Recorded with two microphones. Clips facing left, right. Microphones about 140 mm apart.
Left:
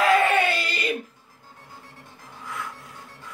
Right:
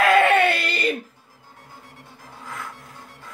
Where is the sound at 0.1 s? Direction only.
65° right (ahead or behind).